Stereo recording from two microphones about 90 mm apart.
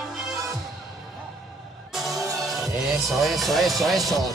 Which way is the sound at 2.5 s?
Centre (ahead or behind).